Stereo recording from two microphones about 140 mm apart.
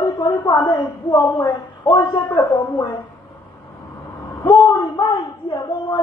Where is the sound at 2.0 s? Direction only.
25° left (ahead or behind).